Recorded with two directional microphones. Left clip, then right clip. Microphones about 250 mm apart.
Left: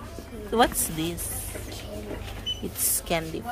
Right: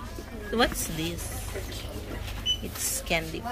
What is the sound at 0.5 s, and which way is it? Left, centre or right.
Speech, centre.